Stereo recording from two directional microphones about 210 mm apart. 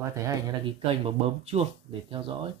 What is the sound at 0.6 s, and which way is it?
Speech, 25° right (ahead or behind).